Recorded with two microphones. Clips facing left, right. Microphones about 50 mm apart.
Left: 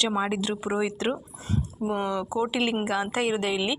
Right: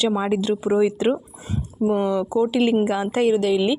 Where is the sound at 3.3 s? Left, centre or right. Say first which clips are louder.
Right 8 dB; centre.